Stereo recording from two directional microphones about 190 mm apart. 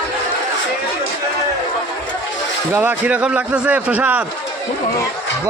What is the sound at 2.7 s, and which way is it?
A man's voice, 10° right (ahead or behind).